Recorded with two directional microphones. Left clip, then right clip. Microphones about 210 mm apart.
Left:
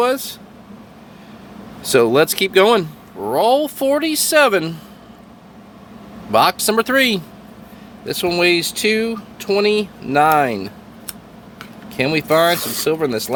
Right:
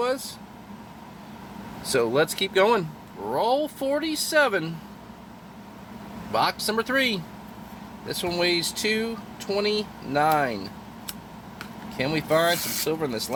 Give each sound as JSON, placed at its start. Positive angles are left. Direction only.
{"t": 0.0, "sound": "speech", "side_deg": 50}
{"t": 1.9, "sound": "speech", "side_deg": 45}
{"t": 6.3, "sound": "speech", "side_deg": 45}
{"t": 11.9, "sound": "speech", "side_deg": 50}